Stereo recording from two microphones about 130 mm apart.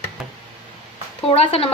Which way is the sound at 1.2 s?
50° left (ahead or behind).